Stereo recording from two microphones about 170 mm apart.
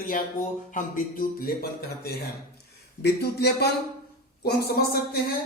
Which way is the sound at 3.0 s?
75° left (ahead or behind).